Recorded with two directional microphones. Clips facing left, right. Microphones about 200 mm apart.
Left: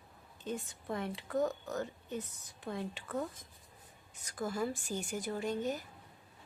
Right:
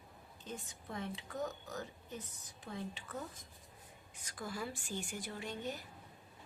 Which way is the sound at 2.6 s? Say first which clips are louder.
Left 5 dB; 60° left (ahead or behind).